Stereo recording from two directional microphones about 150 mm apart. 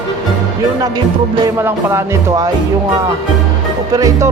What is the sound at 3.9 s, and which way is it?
Speech, 25° right (ahead or behind).